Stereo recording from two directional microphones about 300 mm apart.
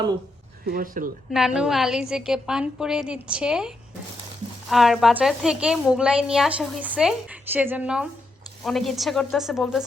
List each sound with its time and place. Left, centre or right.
0.6 s speech: right
1.3 s a woman's voice: centre
4.7 s a woman's voice: centre